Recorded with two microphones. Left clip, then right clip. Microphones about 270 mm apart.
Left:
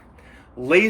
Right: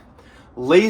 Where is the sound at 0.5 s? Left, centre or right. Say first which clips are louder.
Right 3 dB; centre.